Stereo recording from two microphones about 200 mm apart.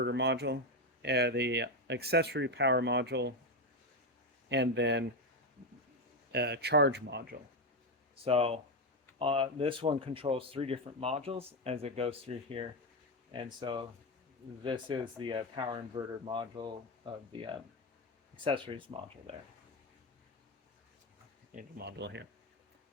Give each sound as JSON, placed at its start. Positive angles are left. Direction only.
{"t": 0.0, "sound": "speech", "side_deg": -60}
{"t": 4.4, "sound": "speech", "side_deg": -60}
{"t": 6.3, "sound": "speech", "side_deg": -55}
{"t": 8.1, "sound": "speech", "side_deg": -30}
{"t": 21.5, "sound": "speech", "side_deg": -55}